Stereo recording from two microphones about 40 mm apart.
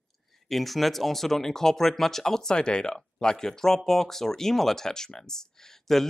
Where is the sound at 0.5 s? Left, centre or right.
Centre.